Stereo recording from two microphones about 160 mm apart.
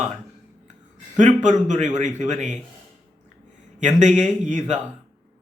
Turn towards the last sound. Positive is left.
turn(degrees=-45)  # may be behind; listen again after turning